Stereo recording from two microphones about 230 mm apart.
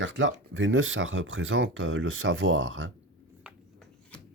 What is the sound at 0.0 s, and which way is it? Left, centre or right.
Speech, right.